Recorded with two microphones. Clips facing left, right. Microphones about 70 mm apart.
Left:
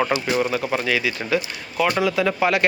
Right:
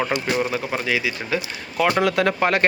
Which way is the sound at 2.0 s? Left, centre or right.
Right.